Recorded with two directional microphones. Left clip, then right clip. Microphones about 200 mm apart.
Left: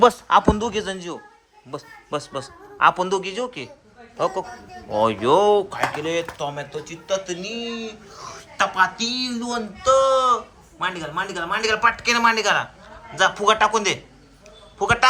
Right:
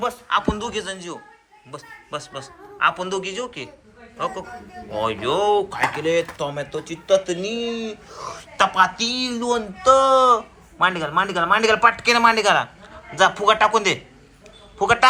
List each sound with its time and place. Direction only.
0.3 s a man's voice: 40° left (ahead or behind)
4.9 s speech: 30° left (ahead or behind); by 15.0 s 10° left (ahead or behind)